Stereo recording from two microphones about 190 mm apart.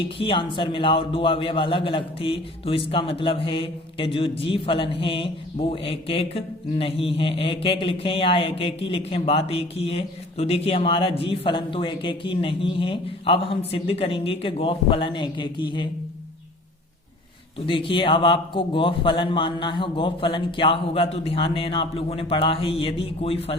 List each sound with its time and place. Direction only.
0.0 s a man's voice: 25° left (ahead or behind)
17.7 s a man's voice: 25° left (ahead or behind)